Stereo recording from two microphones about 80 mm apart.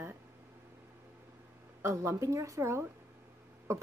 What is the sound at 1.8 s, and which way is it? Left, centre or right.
Speech, right.